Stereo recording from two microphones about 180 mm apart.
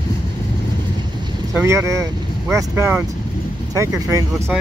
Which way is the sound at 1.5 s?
15° right (ahead or behind).